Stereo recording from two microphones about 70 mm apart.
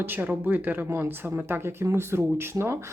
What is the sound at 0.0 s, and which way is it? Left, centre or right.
Speech, right.